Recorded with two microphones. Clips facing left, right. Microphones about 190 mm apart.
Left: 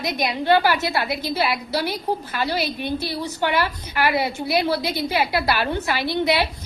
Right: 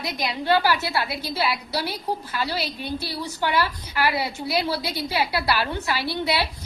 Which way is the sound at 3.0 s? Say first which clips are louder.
Left 3 dB; 20° left (ahead or behind).